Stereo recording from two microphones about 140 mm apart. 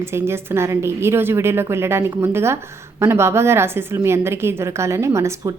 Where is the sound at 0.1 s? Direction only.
20° right (ahead or behind).